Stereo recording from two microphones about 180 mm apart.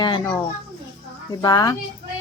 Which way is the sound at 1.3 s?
20° left (ahead or behind).